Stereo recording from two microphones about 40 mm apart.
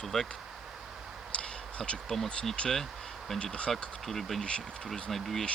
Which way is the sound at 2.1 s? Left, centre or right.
Centre.